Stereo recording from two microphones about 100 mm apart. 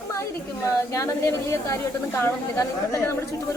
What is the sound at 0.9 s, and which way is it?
A woman's voice, 30° left (ahead or behind).